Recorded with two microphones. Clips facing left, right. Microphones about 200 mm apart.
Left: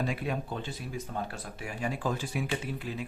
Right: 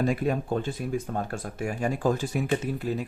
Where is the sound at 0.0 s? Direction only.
45° right (ahead or behind).